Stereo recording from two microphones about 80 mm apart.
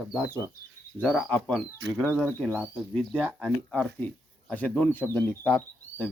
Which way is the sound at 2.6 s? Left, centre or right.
Centre.